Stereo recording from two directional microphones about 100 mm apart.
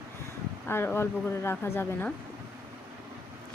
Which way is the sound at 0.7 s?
25° left (ahead or behind).